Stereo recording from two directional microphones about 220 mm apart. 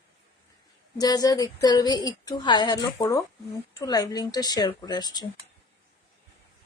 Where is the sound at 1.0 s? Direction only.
15° left (ahead or behind).